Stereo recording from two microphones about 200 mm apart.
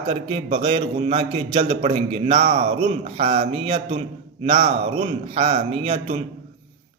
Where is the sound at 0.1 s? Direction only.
25° right (ahead or behind).